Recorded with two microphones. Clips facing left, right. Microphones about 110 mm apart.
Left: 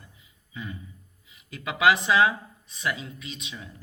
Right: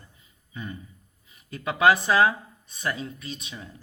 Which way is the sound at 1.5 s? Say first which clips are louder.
Right 2 dB; 40° right (ahead or behind).